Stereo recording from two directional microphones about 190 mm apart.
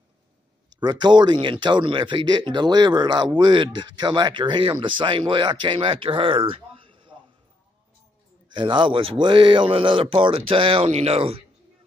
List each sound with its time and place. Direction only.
0.7 s speech: 25° right (ahead or behind)
8.5 s speech: 25° right (ahead or behind)